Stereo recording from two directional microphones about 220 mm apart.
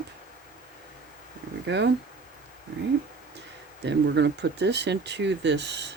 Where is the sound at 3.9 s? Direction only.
50° right (ahead or behind).